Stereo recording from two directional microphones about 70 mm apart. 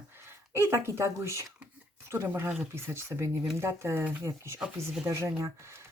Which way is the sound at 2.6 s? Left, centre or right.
Right.